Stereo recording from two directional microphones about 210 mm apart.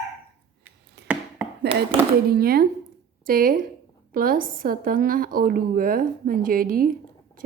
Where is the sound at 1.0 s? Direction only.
55° right (ahead or behind).